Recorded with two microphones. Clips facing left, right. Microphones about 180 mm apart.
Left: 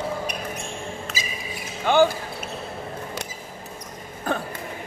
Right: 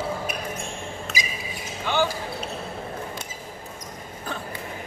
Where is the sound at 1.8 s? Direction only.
50° left (ahead or behind).